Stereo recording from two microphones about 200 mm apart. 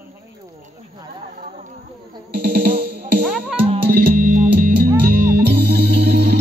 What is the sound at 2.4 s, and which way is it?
Music, 40° right (ahead or behind).